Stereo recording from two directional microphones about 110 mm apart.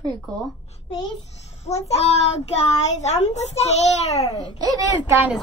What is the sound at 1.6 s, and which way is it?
A child's voice, 80° left.